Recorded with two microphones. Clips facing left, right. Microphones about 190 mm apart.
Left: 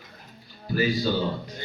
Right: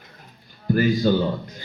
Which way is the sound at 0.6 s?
50° right (ahead or behind).